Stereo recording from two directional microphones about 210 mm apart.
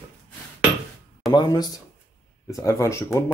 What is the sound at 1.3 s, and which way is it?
Speech, 20° left (ahead or behind).